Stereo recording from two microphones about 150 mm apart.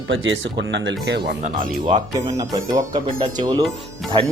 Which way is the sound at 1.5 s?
65° right (ahead or behind).